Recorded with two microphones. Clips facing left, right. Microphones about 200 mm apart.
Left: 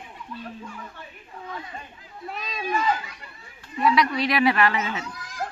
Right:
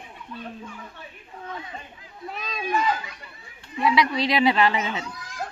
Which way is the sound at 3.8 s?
15° right (ahead or behind).